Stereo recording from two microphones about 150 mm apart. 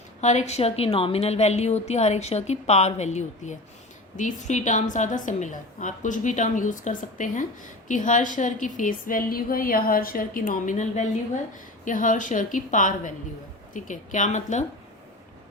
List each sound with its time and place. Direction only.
0.2 s a woman's voice: 50° left (ahead or behind)